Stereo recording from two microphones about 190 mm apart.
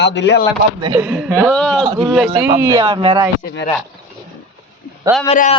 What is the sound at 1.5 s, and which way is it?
Speech, 5° left (ahead or behind).